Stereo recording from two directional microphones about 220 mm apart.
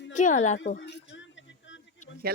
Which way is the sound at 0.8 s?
55° left (ahead or behind).